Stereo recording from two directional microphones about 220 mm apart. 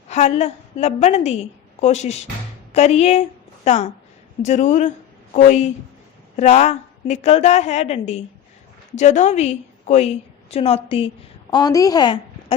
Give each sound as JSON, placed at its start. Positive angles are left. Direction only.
{"t": 0.1, "sound": "a woman's voice", "side_deg": 30}